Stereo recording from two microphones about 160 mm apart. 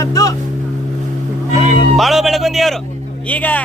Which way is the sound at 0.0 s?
20° left (ahead or behind).